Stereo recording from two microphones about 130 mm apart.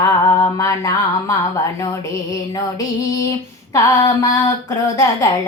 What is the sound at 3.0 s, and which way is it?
Female singing, 25° left (ahead or behind).